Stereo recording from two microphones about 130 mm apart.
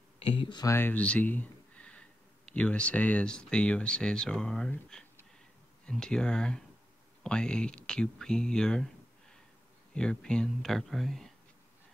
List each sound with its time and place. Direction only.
0.2 s speech: 40° left (ahead or behind)
0.7 s speech: 15° left (ahead or behind)
9.9 s speech: 5° left (ahead or behind)